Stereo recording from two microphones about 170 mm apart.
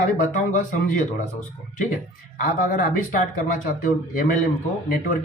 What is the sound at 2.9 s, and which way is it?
Speech, 50° left (ahead or behind).